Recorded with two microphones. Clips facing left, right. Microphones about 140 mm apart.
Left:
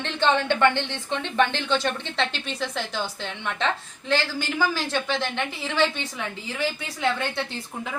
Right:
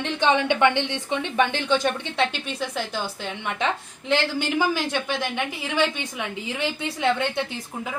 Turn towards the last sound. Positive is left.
turn(degrees=-15)  # may be behind; listen again after turning